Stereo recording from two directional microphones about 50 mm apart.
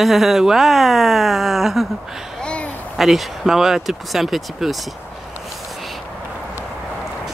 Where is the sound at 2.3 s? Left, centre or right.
Left.